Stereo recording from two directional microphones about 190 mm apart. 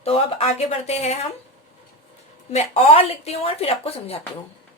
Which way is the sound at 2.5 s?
35° left (ahead or behind).